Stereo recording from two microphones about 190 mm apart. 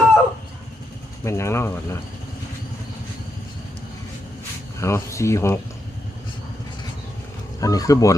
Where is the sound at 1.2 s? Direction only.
15° left (ahead or behind).